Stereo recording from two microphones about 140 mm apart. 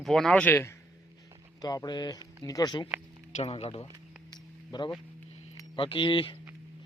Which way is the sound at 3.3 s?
45° left (ahead or behind).